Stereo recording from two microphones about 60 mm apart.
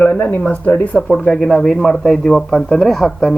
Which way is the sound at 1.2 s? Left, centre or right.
Centre.